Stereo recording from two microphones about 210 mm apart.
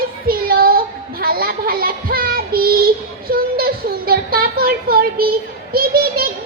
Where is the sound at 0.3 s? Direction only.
45° right (ahead or behind).